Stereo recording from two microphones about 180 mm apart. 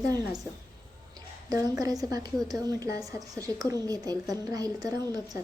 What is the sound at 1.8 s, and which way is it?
Speech, 20° right (ahead or behind).